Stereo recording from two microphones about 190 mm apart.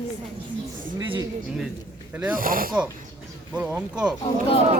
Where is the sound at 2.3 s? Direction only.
50° right (ahead or behind).